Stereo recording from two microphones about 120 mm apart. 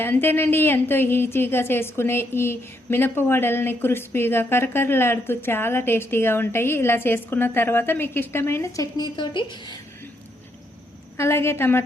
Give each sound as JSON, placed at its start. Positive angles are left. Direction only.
{"t": 0.0, "sound": "a woman's voice", "side_deg": 15}
{"t": 11.2, "sound": "a woman's voice", "side_deg": 20}